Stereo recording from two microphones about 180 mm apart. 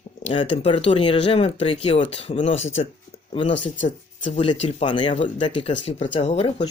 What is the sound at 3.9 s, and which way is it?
Speech, 40° left (ahead or behind).